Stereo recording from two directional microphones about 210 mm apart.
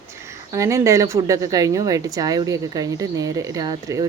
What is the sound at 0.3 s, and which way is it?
Speech, 15° right (ahead or behind).